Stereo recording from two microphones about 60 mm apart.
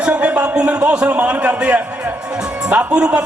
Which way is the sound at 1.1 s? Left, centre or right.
Right.